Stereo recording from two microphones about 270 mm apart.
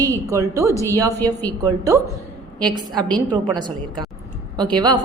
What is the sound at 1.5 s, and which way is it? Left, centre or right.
A woman's voice, centre.